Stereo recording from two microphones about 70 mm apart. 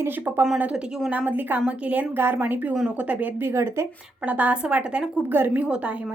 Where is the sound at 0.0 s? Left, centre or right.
Right.